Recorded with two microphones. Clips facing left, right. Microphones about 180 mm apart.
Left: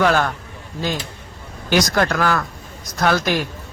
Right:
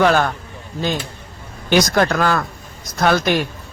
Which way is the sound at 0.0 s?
20° right (ahead or behind).